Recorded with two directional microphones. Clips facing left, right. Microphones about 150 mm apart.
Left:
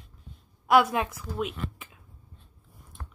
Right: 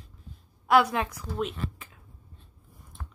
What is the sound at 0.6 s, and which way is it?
Speech, 10° left (ahead or behind).